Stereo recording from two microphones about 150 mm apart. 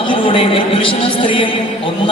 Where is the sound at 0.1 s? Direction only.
40° left (ahead or behind).